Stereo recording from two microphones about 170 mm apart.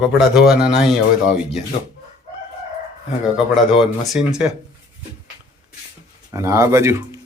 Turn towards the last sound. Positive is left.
turn(degrees=-15)  # may be behind; listen again after turning